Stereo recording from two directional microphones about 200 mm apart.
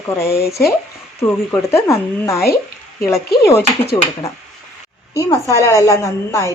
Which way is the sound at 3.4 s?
15° left (ahead or behind).